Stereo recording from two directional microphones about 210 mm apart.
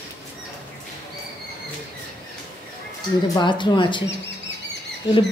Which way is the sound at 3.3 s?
20° left (ahead or behind).